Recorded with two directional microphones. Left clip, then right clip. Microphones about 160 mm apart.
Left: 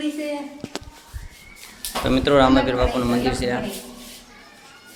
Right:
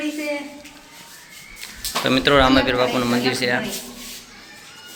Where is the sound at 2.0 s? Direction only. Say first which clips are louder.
Right 1 dB; 10° left (ahead or behind).